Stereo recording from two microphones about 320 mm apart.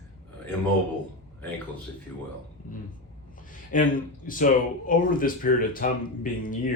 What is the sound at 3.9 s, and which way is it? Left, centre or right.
Speech, left.